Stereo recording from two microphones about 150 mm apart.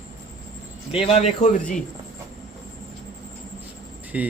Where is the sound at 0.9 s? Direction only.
40° left (ahead or behind); by 1.8 s 60° left (ahead or behind).